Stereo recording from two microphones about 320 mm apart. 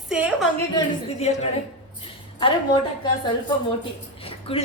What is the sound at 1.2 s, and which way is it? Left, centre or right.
Speech, centre.